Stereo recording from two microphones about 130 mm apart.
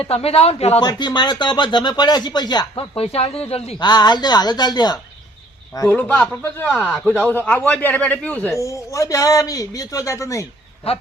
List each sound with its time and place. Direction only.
0.0 s speech: 50° left (ahead or behind)
0.8 s speech: 35° left (ahead or behind)
2.7 s speech: 45° left (ahead or behind)
3.8 s speech: 35° left (ahead or behind)
5.9 s speech: 15° left (ahead or behind)
8.5 s a man's voice: 25° left (ahead or behind)
10.8 s speech: 50° left (ahead or behind)